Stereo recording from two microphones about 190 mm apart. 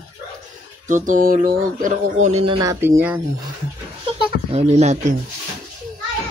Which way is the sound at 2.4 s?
30° right (ahead or behind).